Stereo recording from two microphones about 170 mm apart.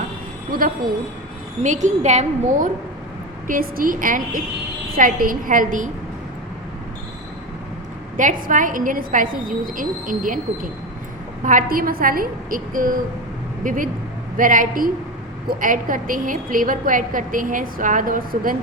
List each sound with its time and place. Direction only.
1.6 s a woman's voice: 45° right (ahead or behind)
3.4 s a woman's voice: 55° right (ahead or behind)
8.1 s a woman's voice: 50° right (ahead or behind)